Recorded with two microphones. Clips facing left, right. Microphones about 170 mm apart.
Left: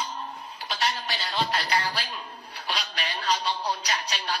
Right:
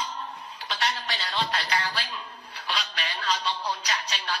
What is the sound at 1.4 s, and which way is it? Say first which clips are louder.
Music: left 3 dB; 40° left (ahead or behind).